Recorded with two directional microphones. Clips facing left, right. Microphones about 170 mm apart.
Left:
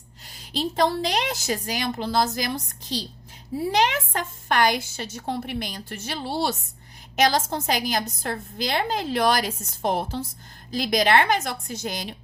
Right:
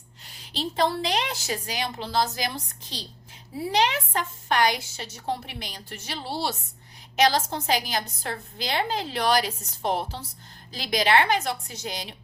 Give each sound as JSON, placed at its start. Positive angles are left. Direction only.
{"t": 0.3, "sound": "a woman's voice", "side_deg": 40}
{"t": 3.7, "sound": "a woman's voice", "side_deg": 50}